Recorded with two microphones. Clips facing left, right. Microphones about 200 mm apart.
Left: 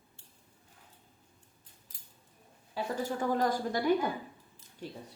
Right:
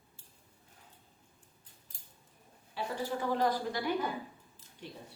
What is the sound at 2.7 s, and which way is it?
A woman's voice, 45° left (ahead or behind).